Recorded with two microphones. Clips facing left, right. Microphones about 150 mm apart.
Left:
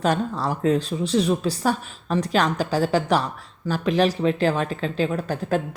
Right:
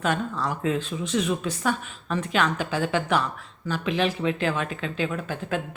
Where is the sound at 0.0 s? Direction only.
35° left (ahead or behind).